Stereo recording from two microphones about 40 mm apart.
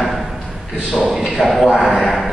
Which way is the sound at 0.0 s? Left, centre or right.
Centre.